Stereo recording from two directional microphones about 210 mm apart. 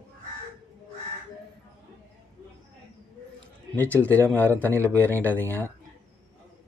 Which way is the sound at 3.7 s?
10° left (ahead or behind).